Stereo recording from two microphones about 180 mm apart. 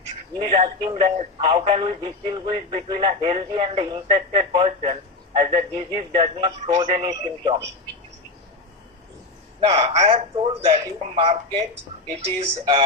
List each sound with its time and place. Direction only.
0.3 s a man's voice: 30° right (ahead or behind)
9.6 s a man's voice: 30° right (ahead or behind)